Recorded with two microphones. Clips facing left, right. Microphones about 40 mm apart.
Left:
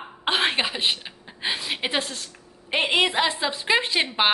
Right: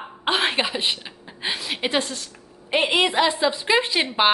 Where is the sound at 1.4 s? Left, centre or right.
Centre.